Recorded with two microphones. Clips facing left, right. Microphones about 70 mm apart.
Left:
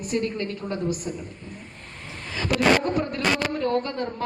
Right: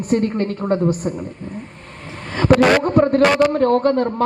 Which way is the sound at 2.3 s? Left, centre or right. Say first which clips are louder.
Right 12 dB; right.